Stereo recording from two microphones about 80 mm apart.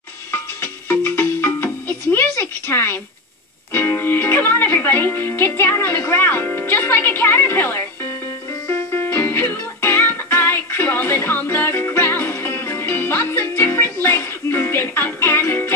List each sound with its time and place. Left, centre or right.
0.3 s music: left
3.7 s speech: left
8.6 s music: left